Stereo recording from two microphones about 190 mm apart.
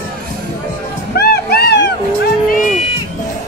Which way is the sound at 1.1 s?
55° left (ahead or behind).